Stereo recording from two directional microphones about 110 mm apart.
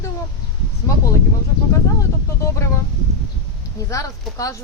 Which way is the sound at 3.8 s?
30° left (ahead or behind).